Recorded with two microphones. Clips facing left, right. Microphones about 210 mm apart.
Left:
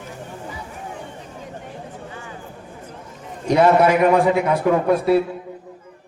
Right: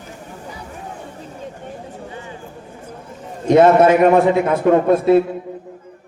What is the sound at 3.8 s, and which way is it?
A man's voice, 25° right (ahead or behind).